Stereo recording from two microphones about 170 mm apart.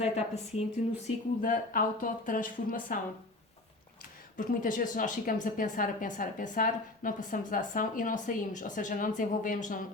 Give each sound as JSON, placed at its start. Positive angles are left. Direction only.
{"t": 0.0, "sound": "a woman's voice", "side_deg": 40}
{"t": 1.0, "sound": "a woman's voice", "side_deg": 50}
{"t": 4.4, "sound": "a woman's voice", "side_deg": 50}